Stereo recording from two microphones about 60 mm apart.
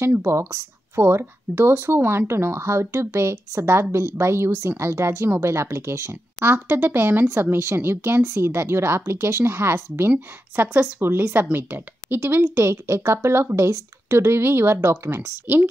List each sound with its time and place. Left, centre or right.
0.2 s speech: right